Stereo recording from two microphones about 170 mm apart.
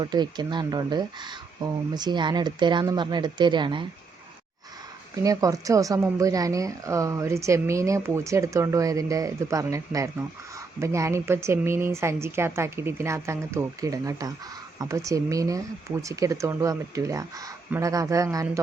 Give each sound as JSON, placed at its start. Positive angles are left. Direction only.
{"t": 0.0, "sound": "speech", "side_deg": -25}
{"t": 5.1, "sound": "speech", "side_deg": -20}